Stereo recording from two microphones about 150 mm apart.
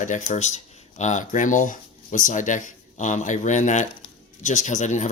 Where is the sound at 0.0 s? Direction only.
50° left (ahead or behind).